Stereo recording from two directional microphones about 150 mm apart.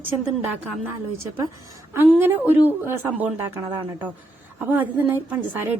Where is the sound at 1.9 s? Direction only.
15° right (ahead or behind).